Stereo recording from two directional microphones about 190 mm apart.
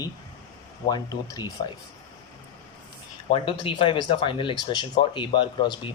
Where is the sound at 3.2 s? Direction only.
30° left (ahead or behind).